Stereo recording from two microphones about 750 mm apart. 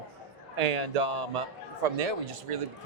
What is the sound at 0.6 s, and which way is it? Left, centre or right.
A man's voice, right.